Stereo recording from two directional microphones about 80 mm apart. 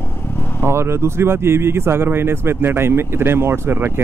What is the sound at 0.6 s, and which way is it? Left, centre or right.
Speech, right.